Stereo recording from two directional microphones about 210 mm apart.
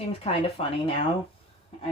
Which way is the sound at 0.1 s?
30° left (ahead or behind).